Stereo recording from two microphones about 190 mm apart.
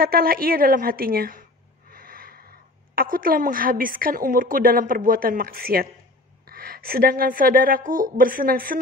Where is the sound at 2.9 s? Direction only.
50° right (ahead or behind).